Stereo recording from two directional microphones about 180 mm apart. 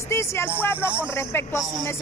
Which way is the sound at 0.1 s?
15° left (ahead or behind).